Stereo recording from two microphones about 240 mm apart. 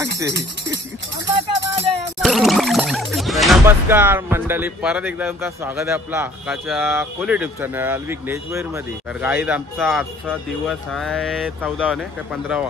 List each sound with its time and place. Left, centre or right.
0.3 s speech: right
1.2 s music: centre
2.2 s a sound: centre
3.6 s speech: centre